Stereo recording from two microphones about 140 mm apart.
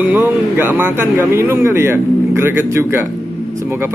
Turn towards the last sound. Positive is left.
turn(degrees=-20)  # may be behind; listen again after turning